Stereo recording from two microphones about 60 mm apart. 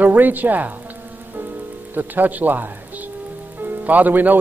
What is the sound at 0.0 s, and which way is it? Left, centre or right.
Speech, right.